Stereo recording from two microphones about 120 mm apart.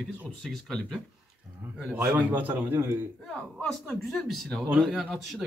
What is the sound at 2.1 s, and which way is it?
Speech, 15° right (ahead or behind).